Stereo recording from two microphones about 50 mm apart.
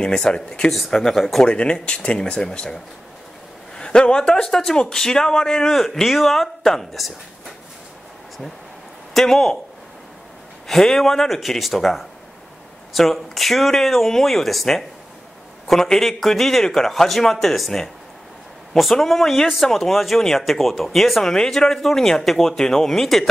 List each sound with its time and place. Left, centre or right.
0.0 s speech: centre
0.7 s speech: centre
1.4 s speech: left; by 7.5 s centre
9.1 s speech: centre
10.7 s speech: centre